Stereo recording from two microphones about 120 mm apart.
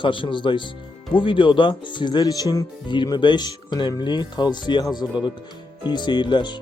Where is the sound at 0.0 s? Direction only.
45° left (ahead or behind).